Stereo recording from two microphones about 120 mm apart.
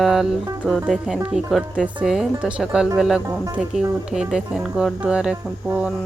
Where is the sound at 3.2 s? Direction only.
30° right (ahead or behind).